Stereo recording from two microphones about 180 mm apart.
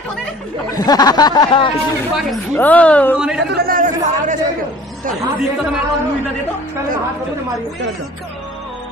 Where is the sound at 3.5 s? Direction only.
55° right (ahead or behind).